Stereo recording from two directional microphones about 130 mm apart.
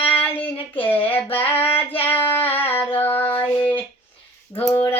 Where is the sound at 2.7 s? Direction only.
45° left (ahead or behind).